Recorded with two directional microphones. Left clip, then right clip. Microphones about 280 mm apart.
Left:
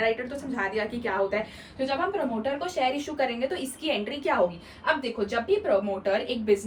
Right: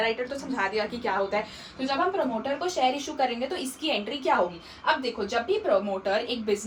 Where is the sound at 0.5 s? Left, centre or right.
Centre.